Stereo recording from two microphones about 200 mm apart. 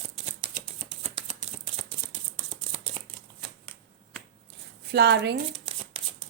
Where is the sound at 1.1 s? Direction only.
35° right (ahead or behind).